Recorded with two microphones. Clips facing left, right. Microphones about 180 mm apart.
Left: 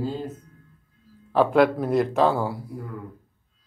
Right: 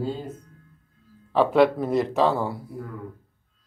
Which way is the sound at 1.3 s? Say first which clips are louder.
Even; centre (ahead or behind).